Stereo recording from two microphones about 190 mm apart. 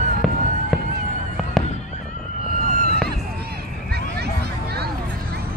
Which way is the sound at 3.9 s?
55° right (ahead or behind).